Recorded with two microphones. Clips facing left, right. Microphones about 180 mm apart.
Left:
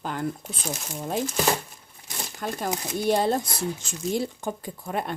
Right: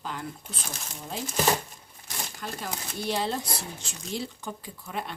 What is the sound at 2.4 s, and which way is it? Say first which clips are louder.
Speech: left 8 dB; 50° left (ahead or behind).